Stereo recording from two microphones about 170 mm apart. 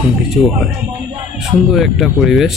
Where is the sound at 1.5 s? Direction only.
Centre (ahead or behind).